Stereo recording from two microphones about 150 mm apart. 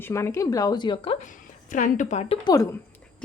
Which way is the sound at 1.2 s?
60° left (ahead or behind).